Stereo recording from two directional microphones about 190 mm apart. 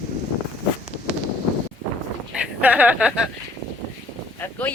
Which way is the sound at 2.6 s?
10° right (ahead or behind).